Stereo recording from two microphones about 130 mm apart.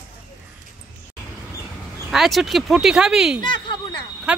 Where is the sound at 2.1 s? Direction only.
Centre (ahead or behind).